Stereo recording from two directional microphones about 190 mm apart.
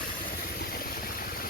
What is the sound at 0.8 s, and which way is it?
Vehicle, 50° left (ahead or behind).